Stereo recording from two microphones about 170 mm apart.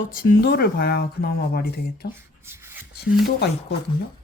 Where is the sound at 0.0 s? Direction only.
55° left (ahead or behind).